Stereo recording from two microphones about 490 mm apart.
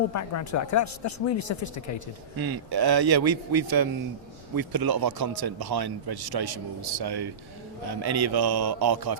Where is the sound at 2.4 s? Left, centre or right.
Right.